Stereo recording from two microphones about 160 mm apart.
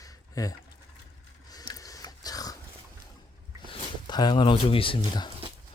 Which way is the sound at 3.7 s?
25° left (ahead or behind).